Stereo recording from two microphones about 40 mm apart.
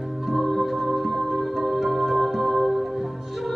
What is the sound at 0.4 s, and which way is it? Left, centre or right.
Music, centre.